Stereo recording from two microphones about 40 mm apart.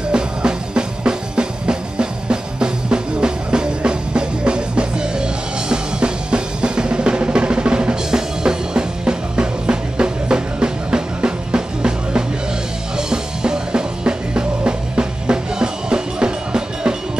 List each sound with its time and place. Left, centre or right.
0.1 s music: right